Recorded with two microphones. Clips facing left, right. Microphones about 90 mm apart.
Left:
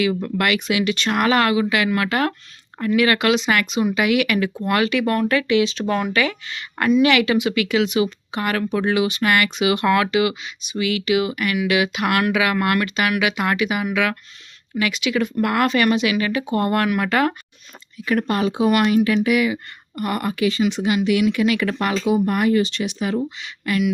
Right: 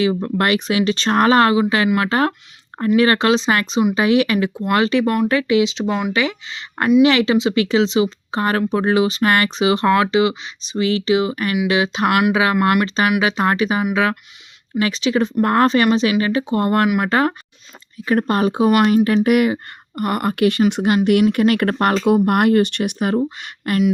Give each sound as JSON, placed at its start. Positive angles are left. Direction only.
{"t": 0.0, "sound": "speech", "side_deg": -30}
{"t": 5.9, "sound": "speech", "side_deg": -10}
{"t": 6.1, "sound": "speech", "side_deg": -25}